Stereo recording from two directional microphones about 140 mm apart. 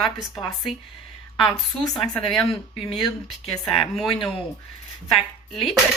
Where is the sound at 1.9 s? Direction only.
5° left (ahead or behind).